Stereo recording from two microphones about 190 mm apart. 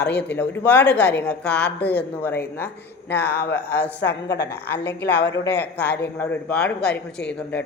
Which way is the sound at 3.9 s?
60° left (ahead or behind).